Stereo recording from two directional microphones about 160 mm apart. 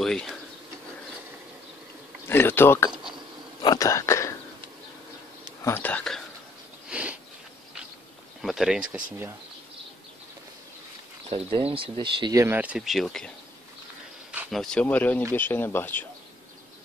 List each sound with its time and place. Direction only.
0.0 s speech: 5° left (ahead or behind)
2.2 s insect: 15° left (ahead or behind)
2.9 s a sound: 5° right (ahead or behind)
3.6 s speech: 20° left (ahead or behind)
5.6 s whispering: 15° left (ahead or behind)
6.9 s sniff: 5° right (ahead or behind)
8.4 s speech: centre (ahead or behind)
11.2 s speech: 40° right (ahead or behind); by 13.3 s 5° left (ahead or behind)
14.5 s speech: 5° left (ahead or behind)